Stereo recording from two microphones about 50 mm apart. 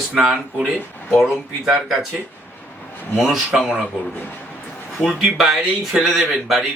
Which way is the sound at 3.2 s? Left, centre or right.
Centre.